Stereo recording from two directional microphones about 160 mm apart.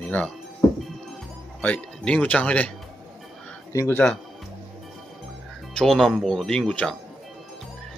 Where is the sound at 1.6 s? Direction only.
5° left (ahead or behind).